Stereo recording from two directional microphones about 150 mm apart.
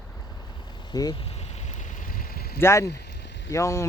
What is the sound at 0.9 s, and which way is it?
Speech, 25° left (ahead or behind).